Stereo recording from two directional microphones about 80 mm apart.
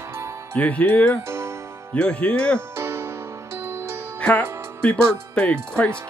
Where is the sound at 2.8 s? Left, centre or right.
Right.